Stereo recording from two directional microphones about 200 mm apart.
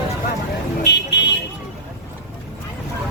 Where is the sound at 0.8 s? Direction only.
60° left (ahead or behind).